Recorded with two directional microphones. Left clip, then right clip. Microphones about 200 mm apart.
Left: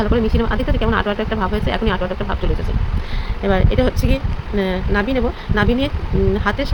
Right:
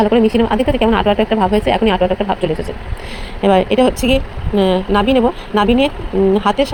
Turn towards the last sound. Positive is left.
turn(degrees=-25)  # may be behind; listen again after turning